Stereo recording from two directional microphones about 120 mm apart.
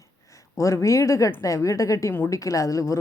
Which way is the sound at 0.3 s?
25° left (ahead or behind).